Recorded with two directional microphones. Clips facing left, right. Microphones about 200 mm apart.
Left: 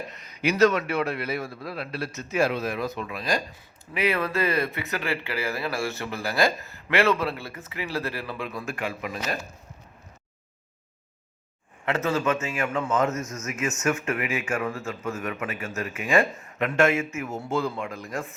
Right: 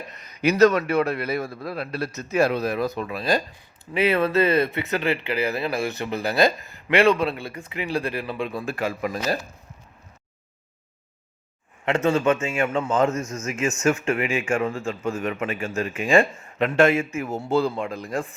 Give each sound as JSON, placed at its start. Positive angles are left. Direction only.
{"t": 0.4, "sound": "a man's voice", "side_deg": -40}
{"t": 11.9, "sound": "a man's voice", "side_deg": -30}